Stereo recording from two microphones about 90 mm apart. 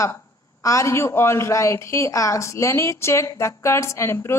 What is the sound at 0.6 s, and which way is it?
A woman's voice, 35° left (ahead or behind).